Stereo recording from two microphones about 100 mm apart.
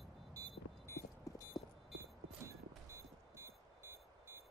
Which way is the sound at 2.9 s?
25° right (ahead or behind).